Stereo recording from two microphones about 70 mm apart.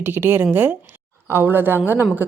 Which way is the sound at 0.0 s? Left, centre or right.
Right.